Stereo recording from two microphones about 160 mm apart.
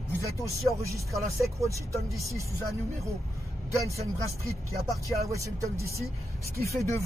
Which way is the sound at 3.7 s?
20° right (ahead or behind).